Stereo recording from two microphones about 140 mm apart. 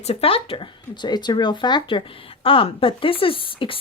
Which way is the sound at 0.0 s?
45° left (ahead or behind).